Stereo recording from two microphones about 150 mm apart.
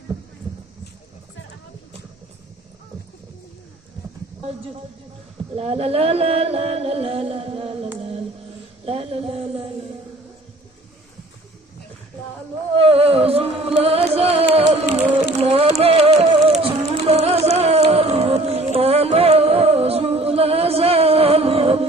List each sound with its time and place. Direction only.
5.6 s music: 40° right (ahead or behind)
12.7 s music: 40° right (ahead or behind)
17.6 s a sound: 45° right (ahead or behind)